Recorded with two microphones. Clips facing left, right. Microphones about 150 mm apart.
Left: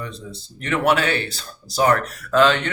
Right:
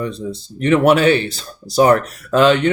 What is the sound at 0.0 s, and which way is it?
Speech, 20° right (ahead or behind).